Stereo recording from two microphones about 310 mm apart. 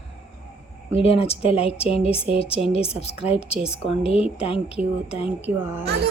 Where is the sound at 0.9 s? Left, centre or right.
Centre.